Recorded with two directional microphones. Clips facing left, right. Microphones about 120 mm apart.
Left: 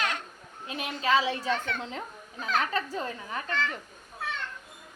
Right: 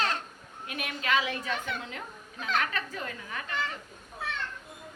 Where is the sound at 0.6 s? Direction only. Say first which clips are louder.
Left 4 dB; 25° left (ahead or behind).